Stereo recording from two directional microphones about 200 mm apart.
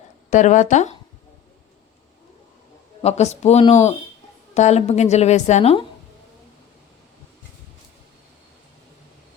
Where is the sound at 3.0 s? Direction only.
35° left (ahead or behind).